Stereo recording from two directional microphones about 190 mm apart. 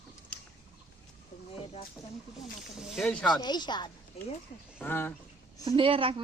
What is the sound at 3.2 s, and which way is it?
Speech, 20° left (ahead or behind).